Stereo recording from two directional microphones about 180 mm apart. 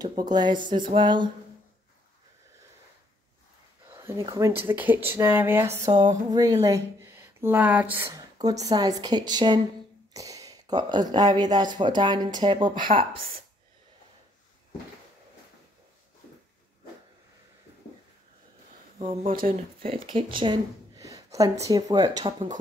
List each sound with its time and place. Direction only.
0.2 s speech: 25° right (ahead or behind)
3.9 s speech: 20° right (ahead or behind)
18.9 s speech: 30° right (ahead or behind)